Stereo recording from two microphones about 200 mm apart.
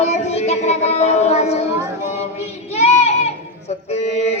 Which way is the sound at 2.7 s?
35° left (ahead or behind).